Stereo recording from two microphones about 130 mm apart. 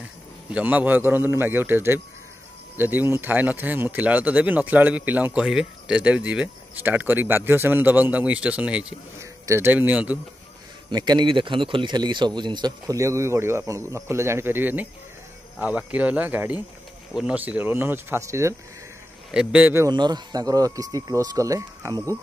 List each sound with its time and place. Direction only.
0.5 s speech: 10° right (ahead or behind)
9.2 s a man's voice: 20° right (ahead or behind)
10.9 s a man's voice: 35° right (ahead or behind)
19.3 s speech: 10° right (ahead or behind)
19.9 s a man's voice: 35° right (ahead or behind)